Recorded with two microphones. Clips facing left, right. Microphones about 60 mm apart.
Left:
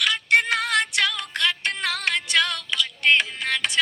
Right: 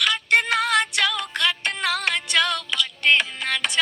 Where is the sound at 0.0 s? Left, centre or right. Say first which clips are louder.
Even; centre.